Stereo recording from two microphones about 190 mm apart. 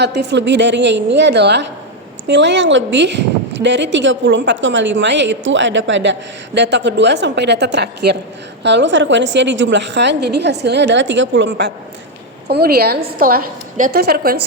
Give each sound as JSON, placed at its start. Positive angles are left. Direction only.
{"t": 0.0, "sound": "a woman's voice", "side_deg": -60}